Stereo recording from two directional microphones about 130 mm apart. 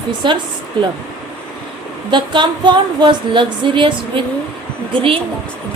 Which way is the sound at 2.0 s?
35° right (ahead or behind).